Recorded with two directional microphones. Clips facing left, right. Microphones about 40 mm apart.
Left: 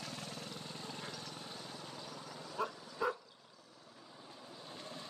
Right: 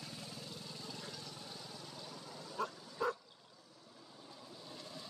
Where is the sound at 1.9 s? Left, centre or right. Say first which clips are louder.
Left 2 dB; left.